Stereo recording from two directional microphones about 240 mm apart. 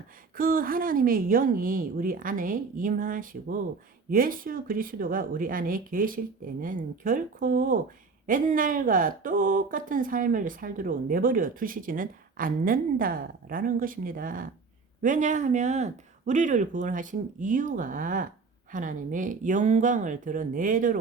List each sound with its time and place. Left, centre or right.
0.3 s speech: right